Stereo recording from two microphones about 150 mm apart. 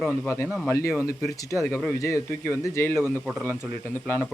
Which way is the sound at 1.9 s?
20° left (ahead or behind).